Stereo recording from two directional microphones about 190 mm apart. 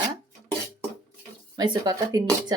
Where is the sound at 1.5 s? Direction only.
25° right (ahead or behind).